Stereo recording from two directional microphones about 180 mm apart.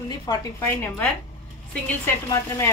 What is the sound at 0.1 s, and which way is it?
Speech, 20° left (ahead or behind).